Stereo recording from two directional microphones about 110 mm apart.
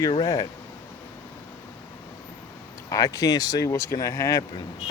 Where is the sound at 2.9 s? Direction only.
30° left (ahead or behind).